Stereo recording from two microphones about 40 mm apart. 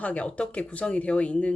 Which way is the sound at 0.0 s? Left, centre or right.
Left.